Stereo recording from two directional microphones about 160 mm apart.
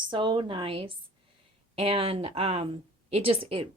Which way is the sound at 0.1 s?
30° right (ahead or behind).